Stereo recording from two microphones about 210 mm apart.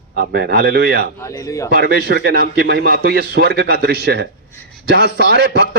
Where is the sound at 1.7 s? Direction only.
50° right (ahead or behind).